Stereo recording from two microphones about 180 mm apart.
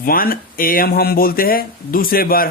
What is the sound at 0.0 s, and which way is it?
Speech, 55° left (ahead or behind).